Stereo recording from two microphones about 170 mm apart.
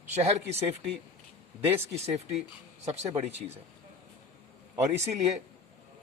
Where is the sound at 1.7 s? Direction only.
15° right (ahead or behind).